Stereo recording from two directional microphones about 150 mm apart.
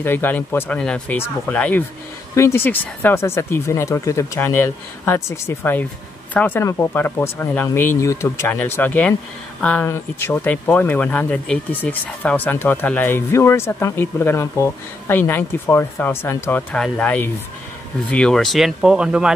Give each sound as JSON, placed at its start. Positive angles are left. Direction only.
{"t": 0.0, "sound": "speech", "side_deg": 15}